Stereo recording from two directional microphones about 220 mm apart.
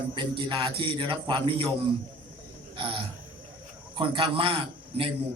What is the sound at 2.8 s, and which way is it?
A man's voice, 20° right (ahead or behind).